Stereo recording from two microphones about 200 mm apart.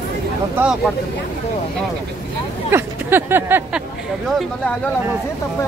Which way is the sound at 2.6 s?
10° right (ahead or behind).